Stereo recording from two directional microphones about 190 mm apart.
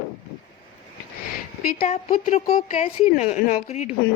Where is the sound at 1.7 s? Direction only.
45° left (ahead or behind).